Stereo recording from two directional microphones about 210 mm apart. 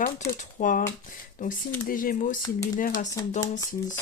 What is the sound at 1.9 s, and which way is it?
Speech, 40° left (ahead or behind).